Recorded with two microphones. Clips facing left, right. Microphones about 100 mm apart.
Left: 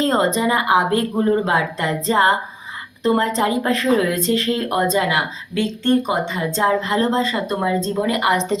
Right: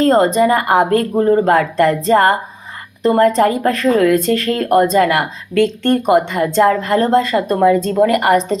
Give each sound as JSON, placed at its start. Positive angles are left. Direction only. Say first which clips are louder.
{"t": 0.0, "sound": "speech", "louder": "right 6 dB", "side_deg": -45}